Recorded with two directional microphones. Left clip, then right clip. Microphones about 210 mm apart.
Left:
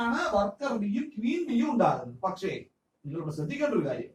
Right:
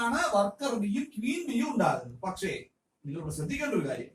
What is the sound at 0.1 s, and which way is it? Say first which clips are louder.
Speech: even; centre (ahead or behind).